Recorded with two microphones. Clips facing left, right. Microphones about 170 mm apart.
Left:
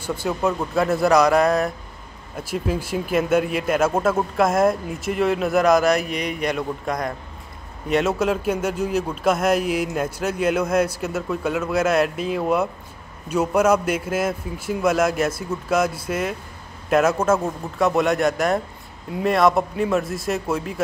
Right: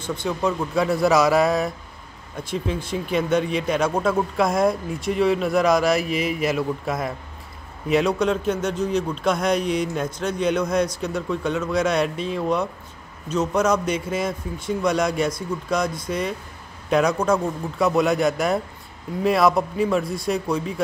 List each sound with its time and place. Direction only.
0.0 s speech: 5° left (ahead or behind)